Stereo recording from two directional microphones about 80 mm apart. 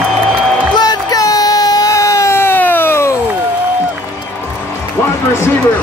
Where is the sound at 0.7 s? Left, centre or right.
Left.